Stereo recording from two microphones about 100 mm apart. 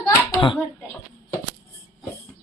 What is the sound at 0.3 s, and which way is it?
Speech, 55° left (ahead or behind).